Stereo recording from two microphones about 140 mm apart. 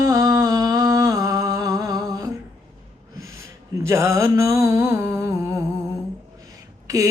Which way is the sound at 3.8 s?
20° right (ahead or behind).